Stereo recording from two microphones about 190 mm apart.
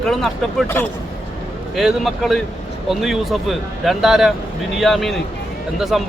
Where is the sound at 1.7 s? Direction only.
Centre (ahead or behind).